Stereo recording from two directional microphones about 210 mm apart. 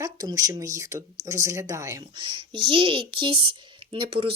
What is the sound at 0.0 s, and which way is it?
A woman's voice, 15° right (ahead or behind).